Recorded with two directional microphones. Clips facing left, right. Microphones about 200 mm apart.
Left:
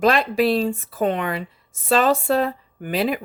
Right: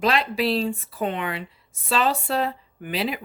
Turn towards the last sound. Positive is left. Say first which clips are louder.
# left 5 dB
turn(degrees=45)  # may be behind; listen again after turning